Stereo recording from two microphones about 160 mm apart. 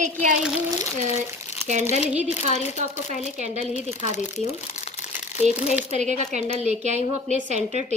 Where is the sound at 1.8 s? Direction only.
45° left (ahead or behind).